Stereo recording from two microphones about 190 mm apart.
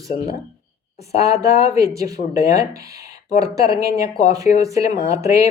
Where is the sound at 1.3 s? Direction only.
35° left (ahead or behind).